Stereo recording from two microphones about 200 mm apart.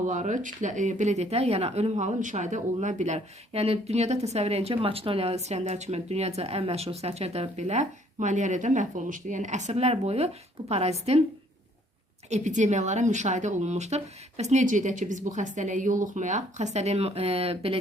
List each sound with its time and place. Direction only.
0.0 s speech: 40° right (ahead or behind)
12.3 s speech: 35° right (ahead or behind)